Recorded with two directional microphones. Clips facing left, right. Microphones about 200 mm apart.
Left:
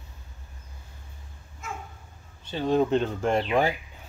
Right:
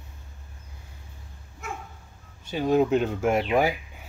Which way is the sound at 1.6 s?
60° right (ahead or behind).